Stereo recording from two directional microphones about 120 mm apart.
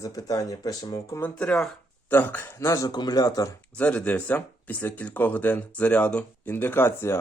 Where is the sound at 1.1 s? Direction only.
15° left (ahead or behind); by 3.5 s 30° left (ahead or behind).